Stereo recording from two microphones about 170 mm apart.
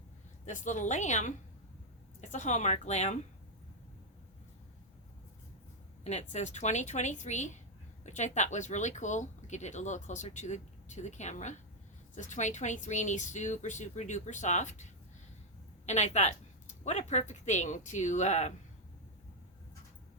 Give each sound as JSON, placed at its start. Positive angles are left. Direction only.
{"t": 0.4, "sound": "speech", "side_deg": 45}
{"t": 2.3, "sound": "speech", "side_deg": 45}
{"t": 6.1, "sound": "speech", "side_deg": 40}
{"t": 15.9, "sound": "speech", "side_deg": 40}